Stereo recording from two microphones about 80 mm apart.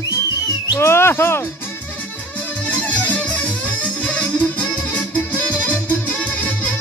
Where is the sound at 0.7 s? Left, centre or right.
Left.